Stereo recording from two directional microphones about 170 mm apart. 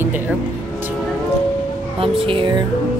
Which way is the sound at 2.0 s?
30° right (ahead or behind).